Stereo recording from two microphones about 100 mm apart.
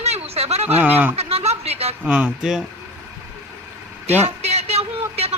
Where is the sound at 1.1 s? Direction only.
90° right.